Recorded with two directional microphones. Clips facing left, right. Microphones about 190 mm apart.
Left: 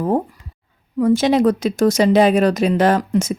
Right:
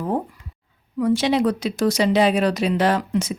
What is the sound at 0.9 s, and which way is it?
Speech, 45° left (ahead or behind).